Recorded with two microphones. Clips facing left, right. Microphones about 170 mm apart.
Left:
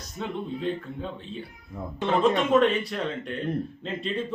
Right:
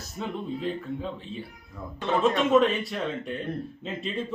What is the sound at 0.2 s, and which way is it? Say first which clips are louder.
Speech: even; centre (ahead or behind).